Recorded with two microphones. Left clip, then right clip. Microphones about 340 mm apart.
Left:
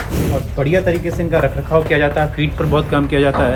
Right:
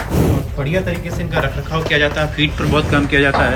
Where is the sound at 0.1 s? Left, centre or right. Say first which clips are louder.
Right 3 dB; centre.